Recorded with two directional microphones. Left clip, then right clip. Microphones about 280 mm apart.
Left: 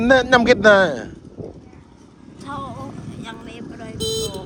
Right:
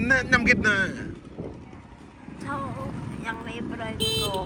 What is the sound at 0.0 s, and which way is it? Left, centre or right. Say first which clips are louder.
Speech: left 7 dB; centre.